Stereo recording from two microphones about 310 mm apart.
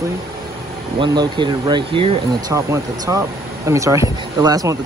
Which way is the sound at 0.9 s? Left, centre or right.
Centre.